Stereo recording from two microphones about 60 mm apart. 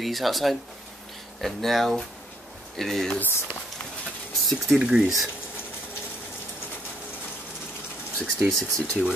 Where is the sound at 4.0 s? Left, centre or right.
Centre.